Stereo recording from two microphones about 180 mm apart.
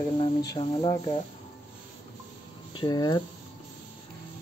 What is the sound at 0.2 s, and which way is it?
Speech, 25° left (ahead or behind).